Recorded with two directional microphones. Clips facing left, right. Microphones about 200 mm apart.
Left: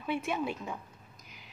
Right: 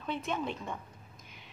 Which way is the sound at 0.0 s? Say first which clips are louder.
Left 2 dB; 10° left (ahead or behind).